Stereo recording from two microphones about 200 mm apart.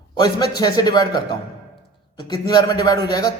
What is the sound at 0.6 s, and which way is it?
Speech, 20° left (ahead or behind).